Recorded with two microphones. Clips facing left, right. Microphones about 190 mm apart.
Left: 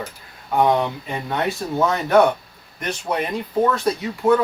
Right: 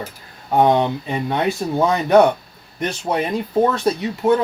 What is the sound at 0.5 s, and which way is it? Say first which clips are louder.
Speech: right 3 dB; 30° right (ahead or behind).